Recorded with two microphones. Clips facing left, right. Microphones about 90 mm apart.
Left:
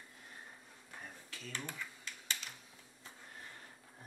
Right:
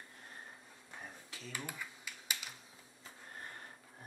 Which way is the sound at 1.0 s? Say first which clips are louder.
Even; 5° right (ahead or behind).